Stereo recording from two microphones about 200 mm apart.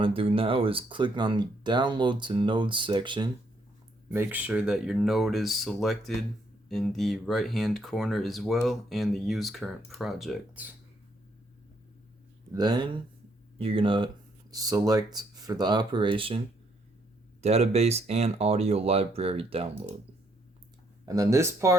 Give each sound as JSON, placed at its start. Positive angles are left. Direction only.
{"t": 0.0, "sound": "speech", "side_deg": -25}
{"t": 4.1, "sound": "speech", "side_deg": -10}
{"t": 12.5, "sound": "speech", "side_deg": -20}
{"t": 17.4, "sound": "speech", "side_deg": -30}
{"t": 21.1, "sound": "speech", "side_deg": -15}